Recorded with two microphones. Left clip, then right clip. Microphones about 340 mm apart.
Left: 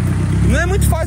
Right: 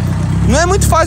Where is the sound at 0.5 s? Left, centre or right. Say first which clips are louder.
Right 8 dB; right.